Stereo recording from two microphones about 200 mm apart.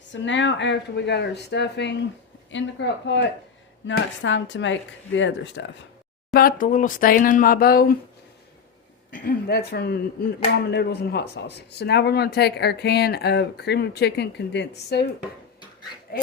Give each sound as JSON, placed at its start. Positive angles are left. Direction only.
{"t": 0.1, "sound": "speech", "side_deg": 65}
{"t": 6.3, "sound": "speech", "side_deg": 45}
{"t": 9.1, "sound": "speech", "side_deg": 45}